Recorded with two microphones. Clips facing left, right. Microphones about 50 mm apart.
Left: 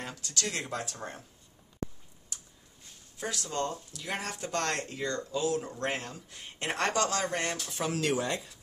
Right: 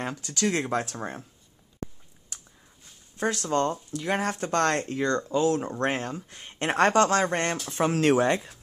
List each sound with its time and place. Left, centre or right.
0.0 s speech: right
3.2 s speech: right